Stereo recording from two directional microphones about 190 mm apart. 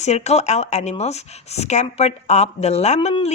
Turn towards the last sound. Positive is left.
turn(degrees=35)  # may be behind; listen again after turning